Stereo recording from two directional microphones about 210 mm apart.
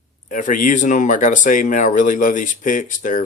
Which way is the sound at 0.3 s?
40° left (ahead or behind).